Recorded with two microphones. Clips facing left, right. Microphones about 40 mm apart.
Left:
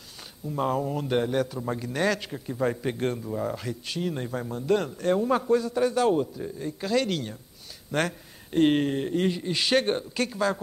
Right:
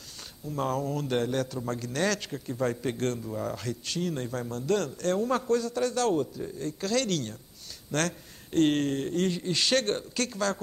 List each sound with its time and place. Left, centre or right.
0.5 s a man's voice: centre